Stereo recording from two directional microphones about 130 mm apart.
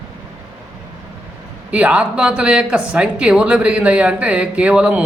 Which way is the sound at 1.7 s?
10° right (ahead or behind).